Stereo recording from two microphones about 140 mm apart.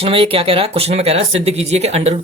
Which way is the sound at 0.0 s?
40° right (ahead or behind).